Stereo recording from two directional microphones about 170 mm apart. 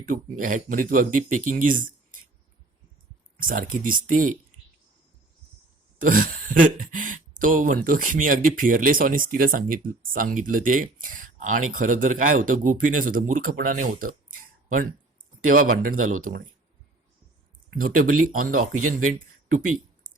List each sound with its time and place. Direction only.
0.0 s speech: 55° right (ahead or behind)
3.4 s speech: 55° right (ahead or behind)
6.0 s speech: 55° right (ahead or behind)
17.7 s speech: 55° right (ahead or behind)